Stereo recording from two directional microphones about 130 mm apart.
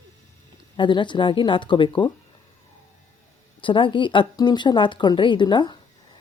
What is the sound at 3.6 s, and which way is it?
Speech, 40° left (ahead or behind).